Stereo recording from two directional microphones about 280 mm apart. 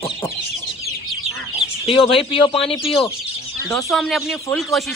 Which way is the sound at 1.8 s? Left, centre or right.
Centre.